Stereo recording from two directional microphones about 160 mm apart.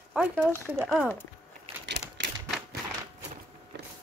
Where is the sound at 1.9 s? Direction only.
90° right.